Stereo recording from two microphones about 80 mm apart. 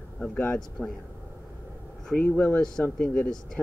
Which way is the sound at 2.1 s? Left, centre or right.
Centre.